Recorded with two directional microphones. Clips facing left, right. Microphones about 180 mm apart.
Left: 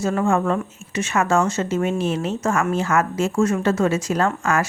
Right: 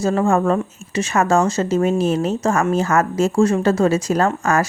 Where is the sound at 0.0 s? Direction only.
35° right (ahead or behind).